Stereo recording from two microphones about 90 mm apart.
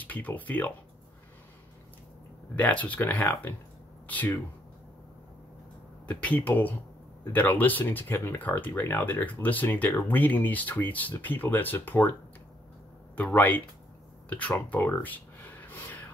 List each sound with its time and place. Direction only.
0.0 s speech: 20° left (ahead or behind)
2.5 s speech: 15° left (ahead or behind)
6.0 s speech: 15° left (ahead or behind)
13.1 s speech: 20° left (ahead or behind)